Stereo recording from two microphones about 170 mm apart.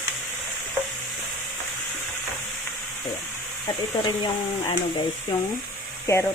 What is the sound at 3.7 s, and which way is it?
Speech, 25° left (ahead or behind).